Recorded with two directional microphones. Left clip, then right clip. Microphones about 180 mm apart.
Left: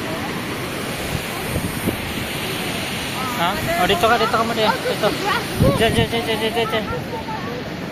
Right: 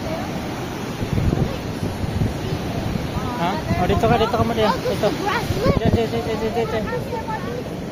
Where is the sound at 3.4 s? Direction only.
10° right (ahead or behind).